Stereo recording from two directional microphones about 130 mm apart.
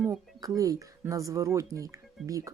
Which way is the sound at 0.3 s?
25° right (ahead or behind).